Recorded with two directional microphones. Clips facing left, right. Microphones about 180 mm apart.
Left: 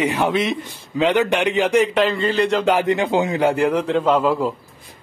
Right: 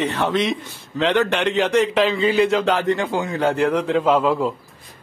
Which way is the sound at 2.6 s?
15° left (ahead or behind).